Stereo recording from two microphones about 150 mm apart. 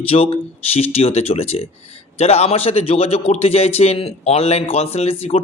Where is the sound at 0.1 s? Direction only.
45° left (ahead or behind).